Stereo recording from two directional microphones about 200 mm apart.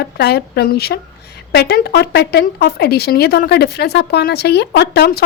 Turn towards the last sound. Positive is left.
turn(degrees=50)  # may be behind; listen again after turning